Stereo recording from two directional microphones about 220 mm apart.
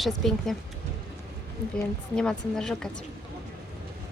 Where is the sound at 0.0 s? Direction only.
Centre (ahead or behind).